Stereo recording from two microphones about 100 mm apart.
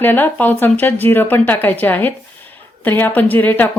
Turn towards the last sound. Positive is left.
turn(degrees=20)  # may be behind; listen again after turning